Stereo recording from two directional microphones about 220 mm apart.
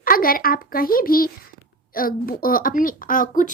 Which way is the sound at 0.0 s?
40° left (ahead or behind).